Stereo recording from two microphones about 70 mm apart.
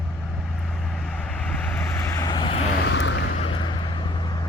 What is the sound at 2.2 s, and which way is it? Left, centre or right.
Vehicle, left.